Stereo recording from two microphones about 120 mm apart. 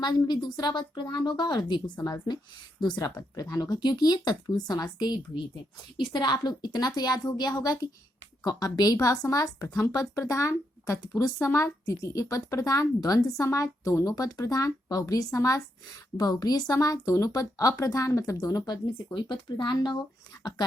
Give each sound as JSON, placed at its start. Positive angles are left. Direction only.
{"t": 0.0, "sound": "speech", "side_deg": 35}
{"t": 2.8, "sound": "speech", "side_deg": 30}